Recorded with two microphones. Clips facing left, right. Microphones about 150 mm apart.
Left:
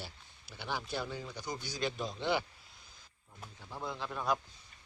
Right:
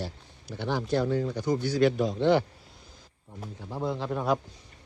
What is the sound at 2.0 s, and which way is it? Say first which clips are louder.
Speech: right 12 dB; 75° right (ahead or behind).